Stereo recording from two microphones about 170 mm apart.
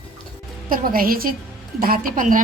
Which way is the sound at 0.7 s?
55° right (ahead or behind).